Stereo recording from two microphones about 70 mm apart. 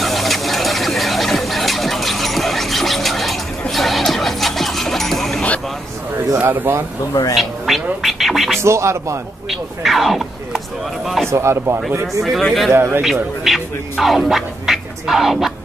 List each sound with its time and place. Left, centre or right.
0.0 s a sound: centre
3.7 s music: centre
6.3 s a sound: right
7.3 s a sound: centre
8.0 s music: centre
8.6 s speech: right
9.5 s speech: centre
11.2 s speech: right
12.2 s speech: centre
12.7 s speech: right
13.0 s speech: centre